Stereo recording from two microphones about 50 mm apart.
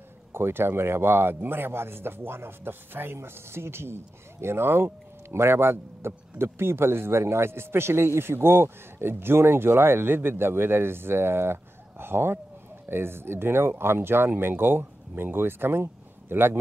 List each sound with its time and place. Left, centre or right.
0.3 s speech: right